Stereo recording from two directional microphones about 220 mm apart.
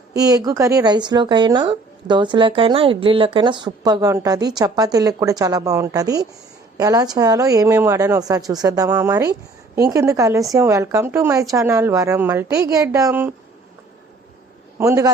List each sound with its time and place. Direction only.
0.1 s speech: 15° right (ahead or behind)
14.8 s speech: 15° right (ahead or behind)